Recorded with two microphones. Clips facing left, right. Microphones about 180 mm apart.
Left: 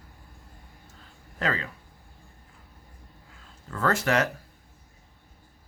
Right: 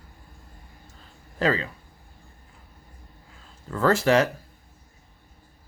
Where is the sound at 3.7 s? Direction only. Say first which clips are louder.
Right 5 dB; 30° right (ahead or behind).